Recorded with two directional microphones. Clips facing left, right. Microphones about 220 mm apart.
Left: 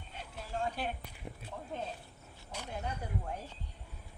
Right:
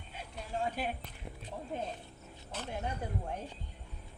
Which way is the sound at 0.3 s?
5° right (ahead or behind).